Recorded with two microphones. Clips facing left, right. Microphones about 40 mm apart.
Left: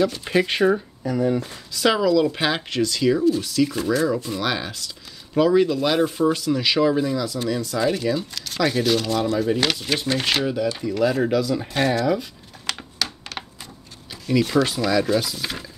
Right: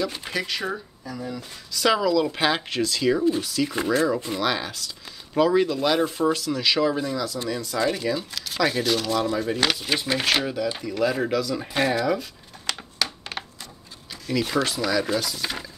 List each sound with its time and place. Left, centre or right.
0.5 s speech: left
1.7 s speech: centre
3.7 s speech: right
4.4 s speech: centre
11.6 s speech: centre
14.1 s a sound: centre
14.6 s speech: centre